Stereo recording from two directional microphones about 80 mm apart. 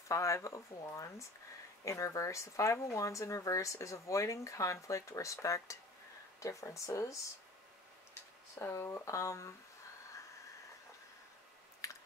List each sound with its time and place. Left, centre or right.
0.1 s speech: left
11.8 s chewing: left